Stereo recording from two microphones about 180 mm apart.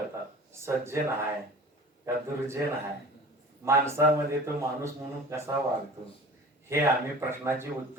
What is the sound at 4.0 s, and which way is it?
Speech, 15° right (ahead or behind).